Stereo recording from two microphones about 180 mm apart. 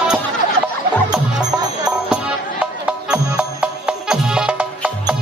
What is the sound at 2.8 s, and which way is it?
Music, 5° right (ahead or behind).